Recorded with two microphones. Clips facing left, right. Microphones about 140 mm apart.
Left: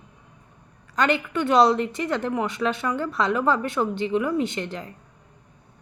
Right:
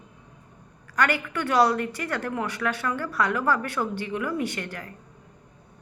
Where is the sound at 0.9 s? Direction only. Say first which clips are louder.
Left 3 dB; 20° left (ahead or behind).